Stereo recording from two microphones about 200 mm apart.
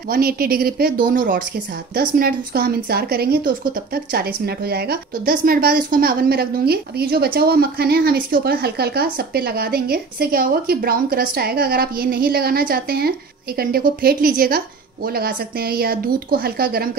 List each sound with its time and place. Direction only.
0.1 s a woman's voice: 50° right (ahead or behind)